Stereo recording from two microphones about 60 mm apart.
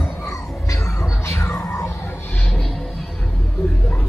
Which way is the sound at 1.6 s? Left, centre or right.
Left.